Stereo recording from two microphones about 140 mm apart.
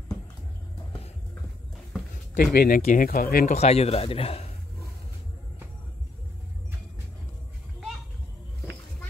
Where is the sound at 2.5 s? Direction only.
90° left.